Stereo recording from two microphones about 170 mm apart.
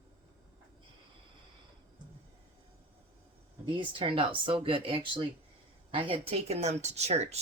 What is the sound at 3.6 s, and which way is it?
Speech, 30° right (ahead or behind).